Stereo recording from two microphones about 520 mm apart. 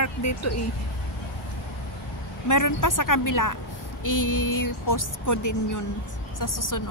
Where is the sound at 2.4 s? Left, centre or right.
Left.